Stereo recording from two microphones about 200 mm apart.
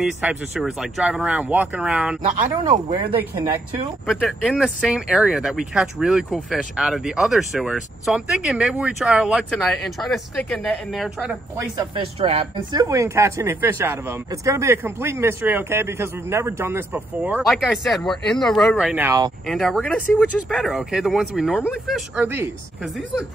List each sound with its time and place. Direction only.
0.0 s speech: 5° right (ahead or behind)
2.9 s speech: 25° right (ahead or behind)
4.1 s speech: centre (ahead or behind)
11.5 s speech: 20° right (ahead or behind)
12.7 s speech: 15° right (ahead or behind)
19.4 s speech: centre (ahead or behind)